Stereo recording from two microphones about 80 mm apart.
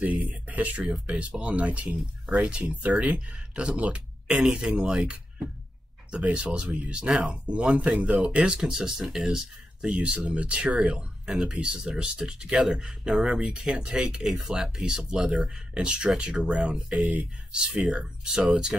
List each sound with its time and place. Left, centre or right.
0.0 s speech: centre
6.1 s speech: centre
17.1 s speech: centre